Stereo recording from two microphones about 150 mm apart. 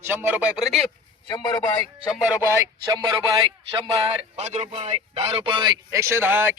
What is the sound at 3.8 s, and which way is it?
Speech, 40° right (ahead or behind).